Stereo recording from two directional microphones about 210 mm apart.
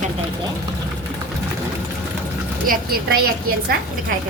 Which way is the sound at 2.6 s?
45° right (ahead or behind).